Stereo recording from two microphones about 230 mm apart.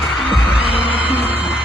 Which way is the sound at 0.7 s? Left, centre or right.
Left.